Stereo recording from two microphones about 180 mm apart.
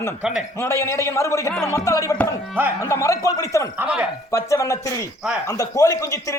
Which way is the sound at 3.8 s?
5° right (ahead or behind).